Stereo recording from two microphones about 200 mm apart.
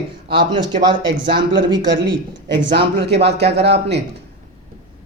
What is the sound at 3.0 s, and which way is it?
Speech, 55° right (ahead or behind).